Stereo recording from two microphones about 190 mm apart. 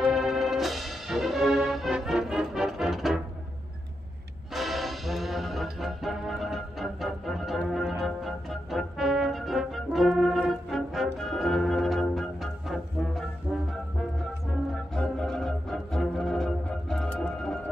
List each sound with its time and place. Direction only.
0.0 s music: centre (ahead or behind)
4.6 s music: centre (ahead or behind)
15.0 s music: 5° left (ahead or behind)